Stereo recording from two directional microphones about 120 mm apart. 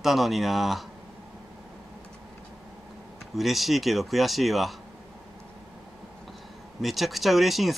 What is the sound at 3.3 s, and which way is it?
Speech, centre (ahead or behind).